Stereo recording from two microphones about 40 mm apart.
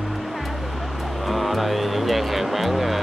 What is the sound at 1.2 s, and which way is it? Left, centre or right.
Vehicle, centre.